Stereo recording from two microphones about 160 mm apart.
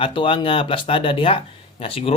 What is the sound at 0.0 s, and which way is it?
Speech, 30° left (ahead or behind).